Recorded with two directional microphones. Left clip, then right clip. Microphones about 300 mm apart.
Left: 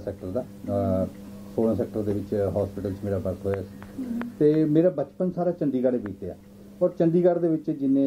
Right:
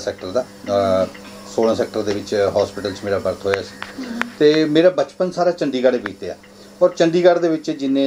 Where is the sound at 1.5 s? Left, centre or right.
Centre.